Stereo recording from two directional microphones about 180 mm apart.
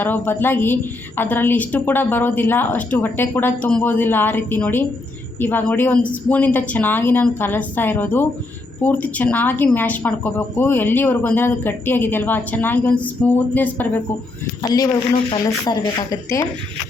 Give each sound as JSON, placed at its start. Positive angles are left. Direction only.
{"t": 0.0, "sound": "speech", "side_deg": 10}
{"t": 14.6, "sound": "speech", "side_deg": 20}